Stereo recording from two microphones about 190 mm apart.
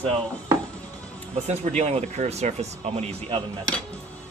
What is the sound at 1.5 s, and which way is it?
Speech, 35° right (ahead or behind).